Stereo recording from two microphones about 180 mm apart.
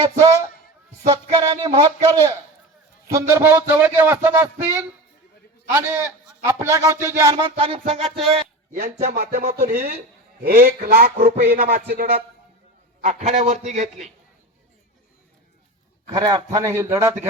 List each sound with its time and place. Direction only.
0.2 s a man's voice: 20° right (ahead or behind)
1.0 s a sound: 20° right (ahead or behind)
3.1 s a man's voice: 15° right (ahead or behind)
7.5 s a man's voice: 30° right (ahead or behind)
8.7 s speech: 55° right (ahead or behind)
11.5 s music: 55° right (ahead or behind)
13.0 s a man's voice: 40° right (ahead or behind)
16.0 s a man's voice: 20° right (ahead or behind)